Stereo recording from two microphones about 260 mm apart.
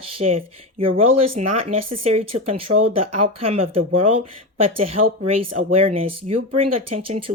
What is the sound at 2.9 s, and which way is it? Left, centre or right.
Speech, right.